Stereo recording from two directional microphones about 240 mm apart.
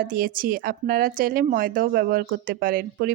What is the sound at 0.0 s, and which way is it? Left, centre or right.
A woman's voice, right.